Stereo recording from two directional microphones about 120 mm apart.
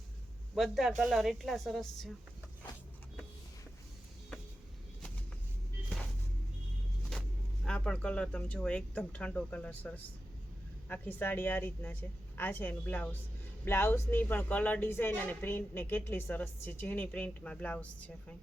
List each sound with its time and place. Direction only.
0.5 s a woman's voice: centre (ahead or behind)
7.1 s speech: 5° left (ahead or behind)